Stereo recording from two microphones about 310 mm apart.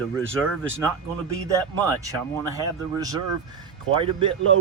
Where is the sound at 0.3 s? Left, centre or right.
Centre.